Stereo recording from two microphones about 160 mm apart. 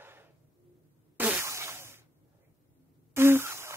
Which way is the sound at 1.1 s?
10° right (ahead or behind).